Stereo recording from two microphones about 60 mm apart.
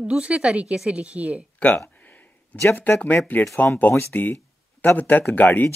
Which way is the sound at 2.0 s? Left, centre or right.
Left.